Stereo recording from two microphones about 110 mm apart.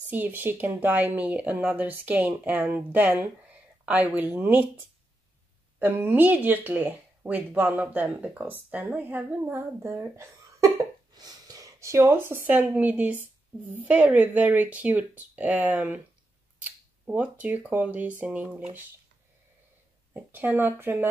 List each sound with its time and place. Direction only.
0.1 s speech: 15° right (ahead or behind)
11.1 s speech: 35° right (ahead or behind); by 18.6 s 15° right (ahead or behind)
20.2 s speech: 15° right (ahead or behind)